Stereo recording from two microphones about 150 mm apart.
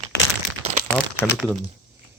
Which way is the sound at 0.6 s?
50° right (ahead or behind).